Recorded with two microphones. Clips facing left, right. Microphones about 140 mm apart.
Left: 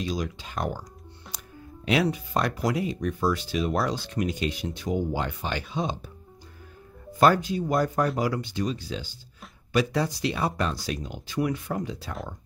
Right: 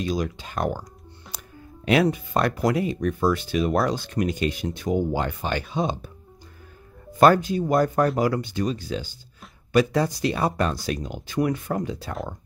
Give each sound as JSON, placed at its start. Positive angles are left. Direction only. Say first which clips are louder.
{"t": 0.0, "sound": "speech", "louder": "right 4 dB", "side_deg": -50}
{"t": 1.3, "sound": "music", "louder": "right 4 dB", "side_deg": -55}
{"t": 1.9, "sound": "speech", "louder": "right 4 dB", "side_deg": -55}
{"t": 7.2, "sound": "speech", "louder": "right 4 dB", "side_deg": -50}